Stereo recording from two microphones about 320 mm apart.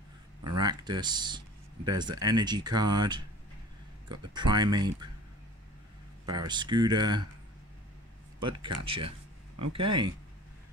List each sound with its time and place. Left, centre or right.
0.6 s speech: centre
4.5 s speech: centre
6.2 s speech: centre
8.5 s speech: centre
9.6 s speech: right